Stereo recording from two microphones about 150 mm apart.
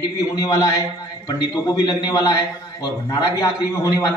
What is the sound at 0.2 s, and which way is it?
A man's voice, 25° left (ahead or behind).